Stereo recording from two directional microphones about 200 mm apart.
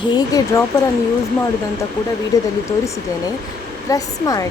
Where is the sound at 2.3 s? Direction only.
15° left (ahead or behind).